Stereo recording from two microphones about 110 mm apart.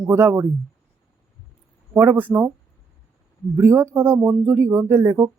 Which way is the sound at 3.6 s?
25° right (ahead or behind).